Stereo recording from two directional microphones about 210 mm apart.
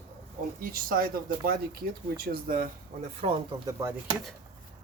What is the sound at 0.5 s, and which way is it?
Speech, 45° right (ahead or behind).